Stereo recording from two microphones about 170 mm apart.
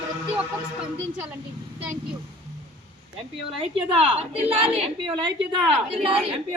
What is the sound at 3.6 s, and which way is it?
Speech, 35° right (ahead or behind).